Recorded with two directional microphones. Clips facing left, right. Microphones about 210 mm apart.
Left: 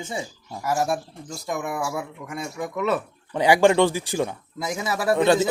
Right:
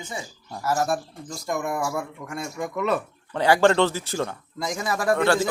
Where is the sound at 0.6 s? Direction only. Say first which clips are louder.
Even; 10° left (ahead or behind).